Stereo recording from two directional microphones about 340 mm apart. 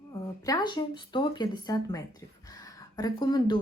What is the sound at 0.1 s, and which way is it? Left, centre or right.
Speech, centre.